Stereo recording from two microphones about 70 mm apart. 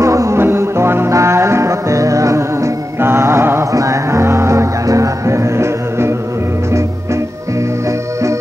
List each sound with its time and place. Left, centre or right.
0.0 s music: right
0.4 s music: right
3.7 s music: right